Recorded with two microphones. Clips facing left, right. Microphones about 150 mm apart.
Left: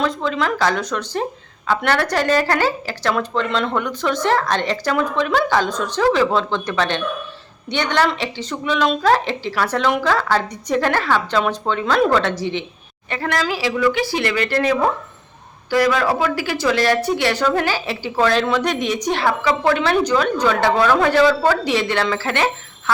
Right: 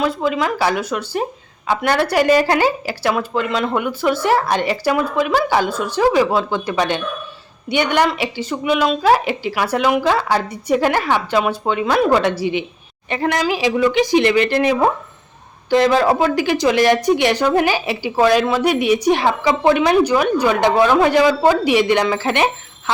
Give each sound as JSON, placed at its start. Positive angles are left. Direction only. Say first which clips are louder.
{"t": 0.0, "sound": "speech", "louder": "right 2 dB", "side_deg": -10}